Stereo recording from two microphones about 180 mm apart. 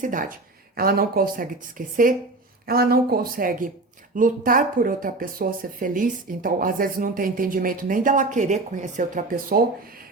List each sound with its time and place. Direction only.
0.0 s a woman's voice: 45° right (ahead or behind)